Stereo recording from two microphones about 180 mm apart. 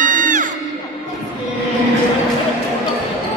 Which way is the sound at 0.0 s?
45° right (ahead or behind).